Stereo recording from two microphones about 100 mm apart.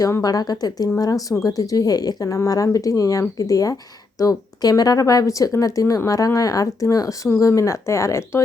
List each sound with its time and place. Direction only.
0.0 s a woman's voice: 35° left (ahead or behind)